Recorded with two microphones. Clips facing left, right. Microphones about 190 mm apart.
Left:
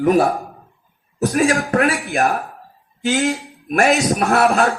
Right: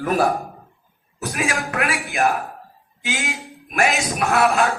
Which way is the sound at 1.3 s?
55° left (ahead or behind).